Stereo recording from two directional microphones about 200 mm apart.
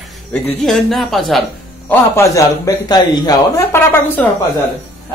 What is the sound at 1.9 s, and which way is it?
A man's voice, 15° left (ahead or behind).